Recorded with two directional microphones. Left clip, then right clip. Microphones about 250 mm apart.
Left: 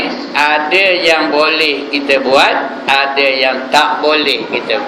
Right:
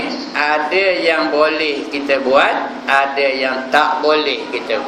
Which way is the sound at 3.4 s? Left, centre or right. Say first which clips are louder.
Left 3 dB; centre.